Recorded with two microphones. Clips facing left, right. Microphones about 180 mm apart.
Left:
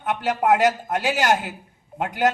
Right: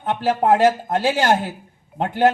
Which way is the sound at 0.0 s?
30° right (ahead or behind).